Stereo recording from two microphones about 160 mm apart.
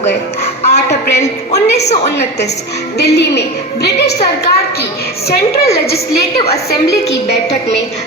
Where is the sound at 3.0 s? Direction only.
90° left.